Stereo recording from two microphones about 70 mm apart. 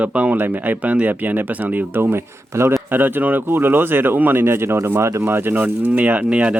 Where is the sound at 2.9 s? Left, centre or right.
Right.